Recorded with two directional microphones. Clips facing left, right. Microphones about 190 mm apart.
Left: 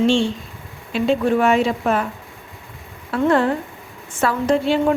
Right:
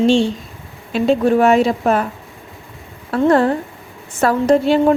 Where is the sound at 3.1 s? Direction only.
40° right (ahead or behind).